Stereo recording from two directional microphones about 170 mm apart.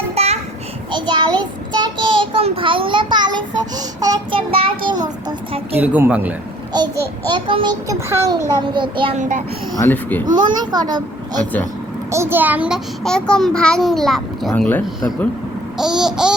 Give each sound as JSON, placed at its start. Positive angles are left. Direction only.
{"t": 0.2, "sound": "a sound", "side_deg": -35}
{"t": 0.9, "sound": "child singing", "side_deg": -25}
{"t": 3.3, "sound": "a child's voice", "side_deg": -20}
{"t": 5.7, "sound": "speech", "side_deg": -10}
{"t": 6.7, "sound": "a child's voice", "side_deg": -25}
{"t": 8.6, "sound": "a child's voice", "side_deg": -30}
{"t": 9.7, "sound": "speech", "side_deg": 10}
{"t": 10.2, "sound": "a child's voice", "side_deg": -25}
{"t": 12.1, "sound": "a child's voice", "side_deg": -15}
{"t": 15.8, "sound": "a child's voice", "side_deg": -5}